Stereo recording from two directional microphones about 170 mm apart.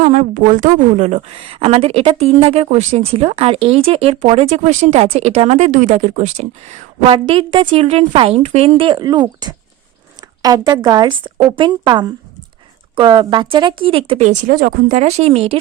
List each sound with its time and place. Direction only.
0.0 s a woman's voice: 40° right (ahead or behind)